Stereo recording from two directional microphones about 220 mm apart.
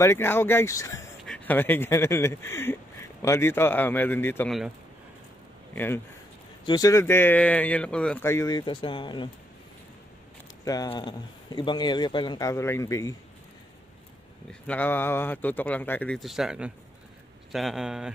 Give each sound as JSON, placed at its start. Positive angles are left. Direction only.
{"t": 0.0, "sound": "speech", "side_deg": 10}
{"t": 6.6, "sound": "speech", "side_deg": 15}
{"t": 10.6, "sound": "a man's voice", "side_deg": 15}
{"t": 14.5, "sound": "speech", "side_deg": 5}